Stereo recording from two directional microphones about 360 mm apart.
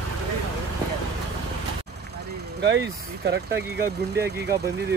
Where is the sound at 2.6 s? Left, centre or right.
Right.